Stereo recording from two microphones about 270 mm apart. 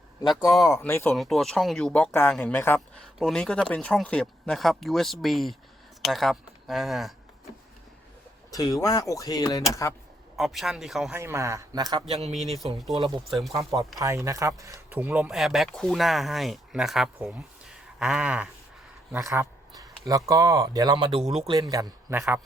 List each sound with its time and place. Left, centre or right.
0.2 s speech: centre
8.4 s speech: centre
10.3 s speech: centre; by 12.3 s right
12.5 s speech: centre
13.5 s speech: centre